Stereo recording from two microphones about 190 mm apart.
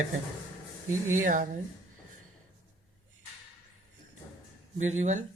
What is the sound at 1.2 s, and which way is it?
Speech, 45° right (ahead or behind).